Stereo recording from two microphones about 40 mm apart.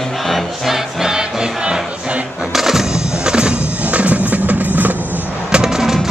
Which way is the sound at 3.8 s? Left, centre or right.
Right.